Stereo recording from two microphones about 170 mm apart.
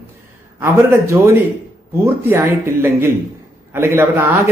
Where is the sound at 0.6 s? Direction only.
15° right (ahead or behind).